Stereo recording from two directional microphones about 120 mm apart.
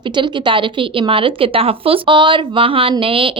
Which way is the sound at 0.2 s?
45° right (ahead or behind).